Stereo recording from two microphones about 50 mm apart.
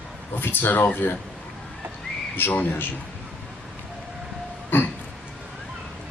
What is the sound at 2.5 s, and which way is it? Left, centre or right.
Speech, left.